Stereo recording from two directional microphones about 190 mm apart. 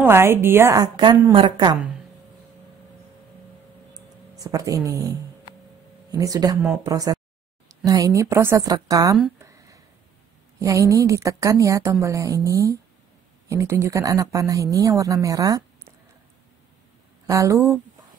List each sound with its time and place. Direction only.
0.0 s a woman's voice: 10° right (ahead or behind)
3.9 s music: 15° right (ahead or behind)
6.1 s a woman's voice: 20° right (ahead or behind)
9.4 s a sound: 15° right (ahead or behind)
10.6 s speech: 15° right (ahead or behind)
17.3 s speech: 15° right (ahead or behind)